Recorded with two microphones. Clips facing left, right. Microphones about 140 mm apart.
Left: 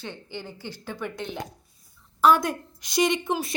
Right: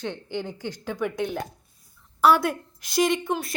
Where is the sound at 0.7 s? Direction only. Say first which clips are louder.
Right 4 dB; 15° right (ahead or behind).